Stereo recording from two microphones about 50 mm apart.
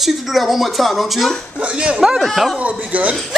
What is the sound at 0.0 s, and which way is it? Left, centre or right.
Speech, centre.